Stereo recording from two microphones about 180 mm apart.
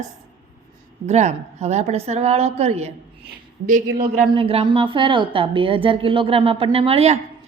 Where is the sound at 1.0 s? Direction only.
40° right (ahead or behind).